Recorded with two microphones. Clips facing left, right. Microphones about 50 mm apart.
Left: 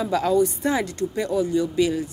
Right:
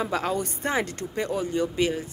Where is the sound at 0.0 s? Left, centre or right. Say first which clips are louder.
Left 6 dB; right.